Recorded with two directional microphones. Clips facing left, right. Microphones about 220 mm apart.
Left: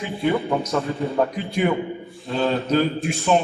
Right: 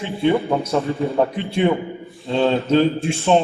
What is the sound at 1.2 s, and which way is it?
Speech, 30° right (ahead or behind).